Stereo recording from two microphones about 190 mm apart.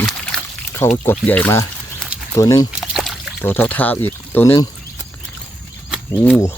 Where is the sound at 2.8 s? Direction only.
Centre (ahead or behind).